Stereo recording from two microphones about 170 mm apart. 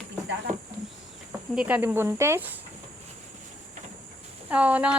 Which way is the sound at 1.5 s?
10° right (ahead or behind).